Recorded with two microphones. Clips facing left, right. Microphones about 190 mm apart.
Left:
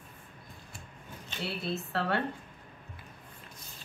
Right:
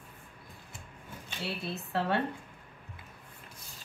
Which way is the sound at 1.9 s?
15° right (ahead or behind).